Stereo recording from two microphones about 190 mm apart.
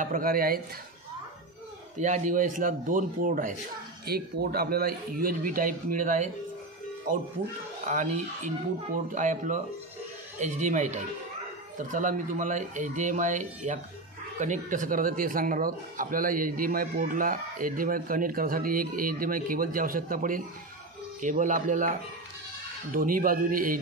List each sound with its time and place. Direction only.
0.0 s speech: 50° right (ahead or behind)
2.0 s speech: 40° right (ahead or behind)